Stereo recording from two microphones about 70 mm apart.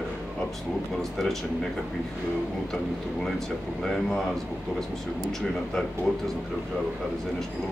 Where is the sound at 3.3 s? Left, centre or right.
Centre.